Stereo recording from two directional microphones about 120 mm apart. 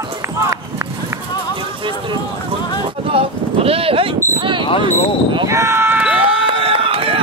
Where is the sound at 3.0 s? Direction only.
55° right (ahead or behind).